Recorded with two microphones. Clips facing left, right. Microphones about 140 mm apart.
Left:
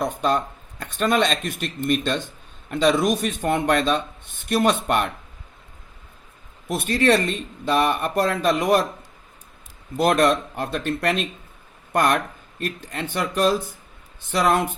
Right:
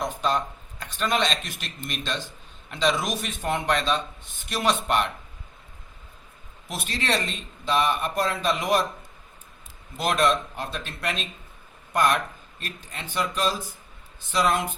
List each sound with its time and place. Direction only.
0.0 s speech: 50° left (ahead or behind)
6.7 s a man's voice: 55° left (ahead or behind)
10.0 s a man's voice: 55° left (ahead or behind)